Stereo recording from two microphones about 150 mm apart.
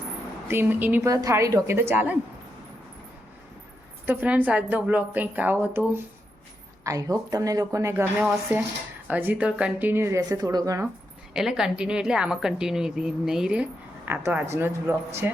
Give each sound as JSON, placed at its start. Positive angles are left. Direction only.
{"t": 0.4, "sound": "a woman's voice", "side_deg": -15}
{"t": 4.0, "sound": "a woman's voice", "side_deg": -15}
{"t": 6.8, "sound": "a woman's voice", "side_deg": -20}
{"t": 11.3, "sound": "a woman's voice", "side_deg": -5}